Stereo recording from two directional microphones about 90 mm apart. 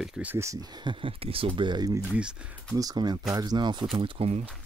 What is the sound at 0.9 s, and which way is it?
Speech, 85° right.